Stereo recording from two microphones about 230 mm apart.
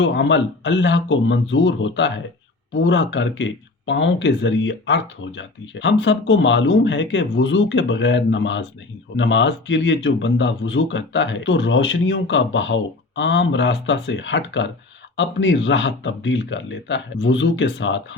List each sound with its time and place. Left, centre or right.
0.0 s speech: left